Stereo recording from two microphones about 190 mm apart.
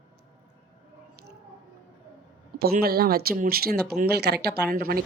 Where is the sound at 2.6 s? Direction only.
50° right (ahead or behind).